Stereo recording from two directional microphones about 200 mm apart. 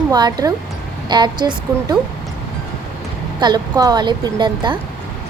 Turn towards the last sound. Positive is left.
turn(degrees=-20)  # may be behind; listen again after turning